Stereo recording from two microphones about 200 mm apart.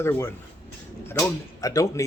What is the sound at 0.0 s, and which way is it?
Speech, 10° left (ahead or behind).